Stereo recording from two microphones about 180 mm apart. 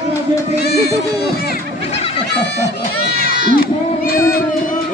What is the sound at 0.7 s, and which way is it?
Music, 65° left (ahead or behind).